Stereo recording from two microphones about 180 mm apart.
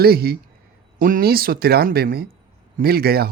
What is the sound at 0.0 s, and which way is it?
Speech, 60° right (ahead or behind).